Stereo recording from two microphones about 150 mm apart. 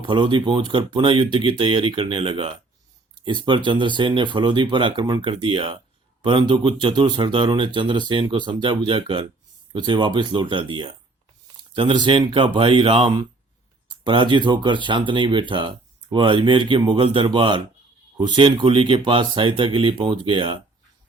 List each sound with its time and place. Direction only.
0.0 s speech: 35° right (ahead or behind)